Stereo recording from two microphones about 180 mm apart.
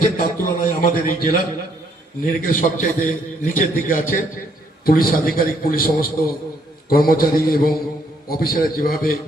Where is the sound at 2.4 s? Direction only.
50° left (ahead or behind).